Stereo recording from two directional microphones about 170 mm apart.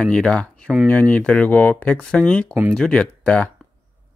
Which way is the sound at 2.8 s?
5° left (ahead or behind).